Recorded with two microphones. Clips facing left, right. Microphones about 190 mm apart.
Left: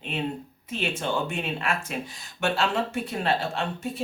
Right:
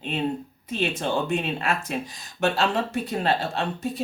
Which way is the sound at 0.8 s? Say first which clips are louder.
Right 3 dB; 35° right (ahead or behind).